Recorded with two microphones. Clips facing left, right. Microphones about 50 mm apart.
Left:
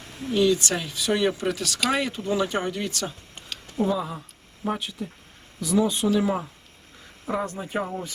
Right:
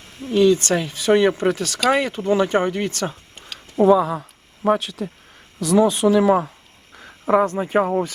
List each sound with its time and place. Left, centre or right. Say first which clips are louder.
0.3 s speech: right 6 dB; right
3.5 s a sound: right 1 dB; centre
3.8 s speech: right 14 dB; right
7.0 s speech: right 11 dB; right